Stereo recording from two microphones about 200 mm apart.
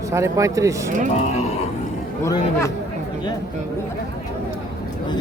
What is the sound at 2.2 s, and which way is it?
Speech, 15° left (ahead or behind).